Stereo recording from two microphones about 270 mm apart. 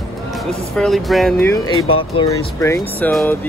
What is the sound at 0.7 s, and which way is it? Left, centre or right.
Speech, centre.